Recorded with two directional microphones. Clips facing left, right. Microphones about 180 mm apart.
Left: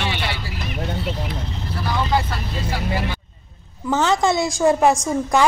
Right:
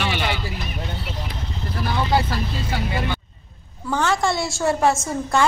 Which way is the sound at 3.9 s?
20° left (ahead or behind).